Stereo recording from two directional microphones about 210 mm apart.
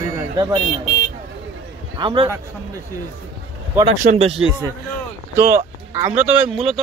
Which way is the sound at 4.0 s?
30° right (ahead or behind).